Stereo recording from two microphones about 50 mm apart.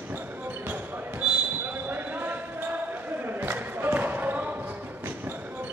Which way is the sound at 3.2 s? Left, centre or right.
Right.